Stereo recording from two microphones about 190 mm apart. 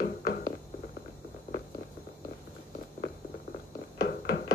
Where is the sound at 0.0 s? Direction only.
50° left (ahead or behind).